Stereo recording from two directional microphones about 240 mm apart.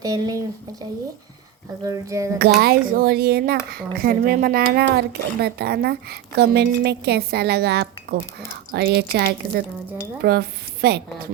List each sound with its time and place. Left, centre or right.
0.0 s speech: centre
2.4 s speech: right